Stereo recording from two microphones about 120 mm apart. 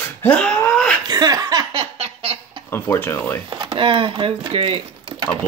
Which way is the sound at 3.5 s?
40° right (ahead or behind).